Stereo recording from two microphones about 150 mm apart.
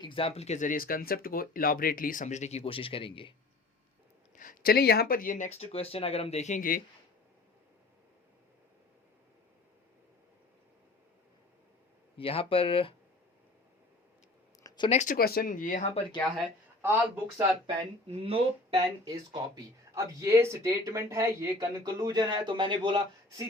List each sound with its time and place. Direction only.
0.0 s speech: 35° left (ahead or behind)
4.4 s speech: 70° left (ahead or behind)
12.1 s speech: 40° left (ahead or behind)
14.8 s speech: 55° left (ahead or behind)
16.8 s speech: 15° right (ahead or behind)
18.2 s speech: 40° right (ahead or behind)
19.1 s speech: 25° right (ahead or behind)